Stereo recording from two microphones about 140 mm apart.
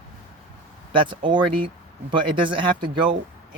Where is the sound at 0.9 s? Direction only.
35° right (ahead or behind).